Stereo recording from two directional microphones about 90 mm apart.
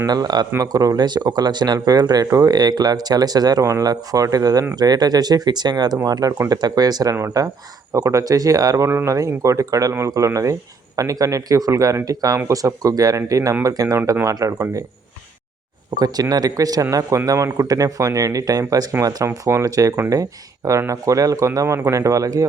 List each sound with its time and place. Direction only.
0.1 s speech: 50° right (ahead or behind)
16.0 s speech: 45° right (ahead or behind)